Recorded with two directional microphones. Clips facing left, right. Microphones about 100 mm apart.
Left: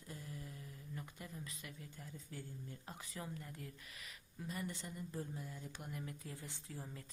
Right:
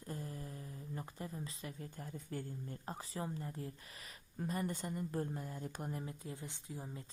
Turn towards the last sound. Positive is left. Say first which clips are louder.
# right 3 dB
turn(degrees=-20)  # may be behind; listen again after turning